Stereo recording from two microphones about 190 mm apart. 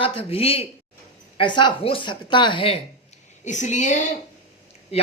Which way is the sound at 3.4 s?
40° left (ahead or behind).